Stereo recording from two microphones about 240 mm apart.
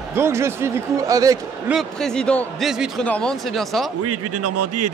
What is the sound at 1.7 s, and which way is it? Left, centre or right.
A man's voice, centre.